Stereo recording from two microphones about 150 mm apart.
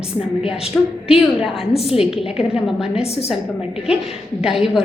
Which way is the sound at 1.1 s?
5° right (ahead or behind).